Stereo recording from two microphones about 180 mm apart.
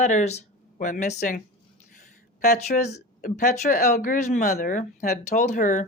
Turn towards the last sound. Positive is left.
turn(degrees=45)  # may be behind; listen again after turning